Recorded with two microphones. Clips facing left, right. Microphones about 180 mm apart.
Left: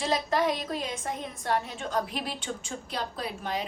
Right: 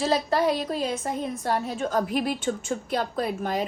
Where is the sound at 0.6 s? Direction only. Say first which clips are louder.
Right 6 dB; 35° right (ahead or behind).